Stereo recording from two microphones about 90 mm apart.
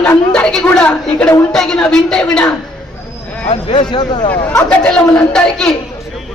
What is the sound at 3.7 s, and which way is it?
Speech, 70° left (ahead or behind).